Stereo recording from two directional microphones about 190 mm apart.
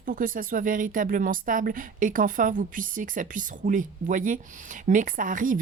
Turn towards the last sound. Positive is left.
turn(degrees=-45)  # may be behind; listen again after turning